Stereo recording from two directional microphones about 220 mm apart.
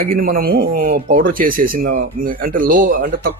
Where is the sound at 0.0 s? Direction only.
40° right (ahead or behind).